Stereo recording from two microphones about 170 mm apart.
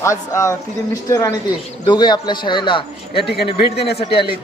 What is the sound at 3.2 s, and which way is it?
Speech, 70° left (ahead or behind).